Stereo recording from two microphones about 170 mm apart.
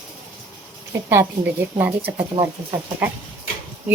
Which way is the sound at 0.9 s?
15° right (ahead or behind).